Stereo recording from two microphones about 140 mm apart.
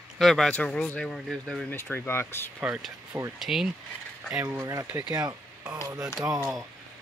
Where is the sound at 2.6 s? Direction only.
10° right (ahead or behind).